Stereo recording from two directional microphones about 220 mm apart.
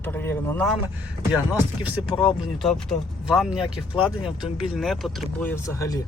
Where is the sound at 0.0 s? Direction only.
10° left (ahead or behind).